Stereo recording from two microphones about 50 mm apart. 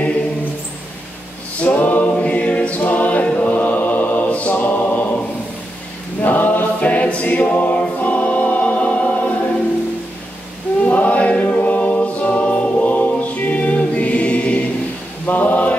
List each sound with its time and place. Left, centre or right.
1.6 s a capella: left
3.3 s mantra: left
6.2 s choir: left
10.8 s choir: left
15.2 s mantra: left